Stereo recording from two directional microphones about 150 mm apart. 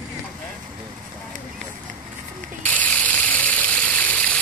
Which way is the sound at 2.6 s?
10° left (ahead or behind).